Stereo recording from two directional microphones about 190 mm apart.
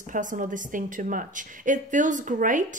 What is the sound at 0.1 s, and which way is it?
A woman's voice, 45° right (ahead or behind).